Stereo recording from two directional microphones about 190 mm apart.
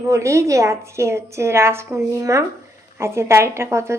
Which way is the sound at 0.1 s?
15° right (ahead or behind).